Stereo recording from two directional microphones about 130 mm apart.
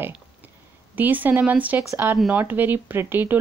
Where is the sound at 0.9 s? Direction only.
15° right (ahead or behind).